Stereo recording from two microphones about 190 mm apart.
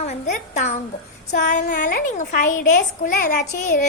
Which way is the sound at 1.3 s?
40° left (ahead or behind).